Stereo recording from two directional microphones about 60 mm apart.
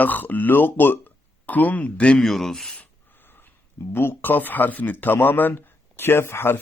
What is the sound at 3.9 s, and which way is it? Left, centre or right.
Speech, left.